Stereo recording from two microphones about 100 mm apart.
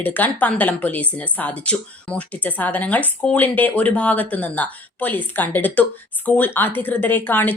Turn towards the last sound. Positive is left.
turn(degrees=20)  # may be behind; listen again after turning